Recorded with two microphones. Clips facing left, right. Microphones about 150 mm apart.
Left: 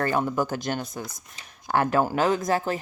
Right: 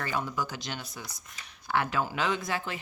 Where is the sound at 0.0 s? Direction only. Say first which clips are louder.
Left 8 dB; 50° left (ahead or behind).